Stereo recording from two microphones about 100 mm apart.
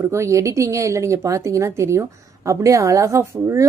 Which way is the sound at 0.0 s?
30° right (ahead or behind).